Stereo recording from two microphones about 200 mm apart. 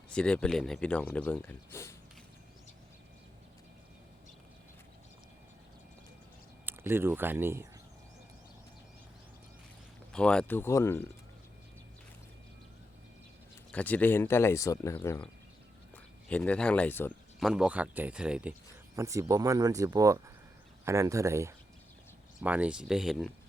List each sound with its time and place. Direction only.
0.1 s speech: 5° left (ahead or behind)
6.7 s speech: 10° right (ahead or behind)
10.1 s speech: 5° left (ahead or behind)
13.7 s speech: 5° left (ahead or behind)
16.3 s speech: 5° left (ahead or behind)
17.4 s speech: 5° right (ahead or behind)
18.9 s speech: 15° right (ahead or behind)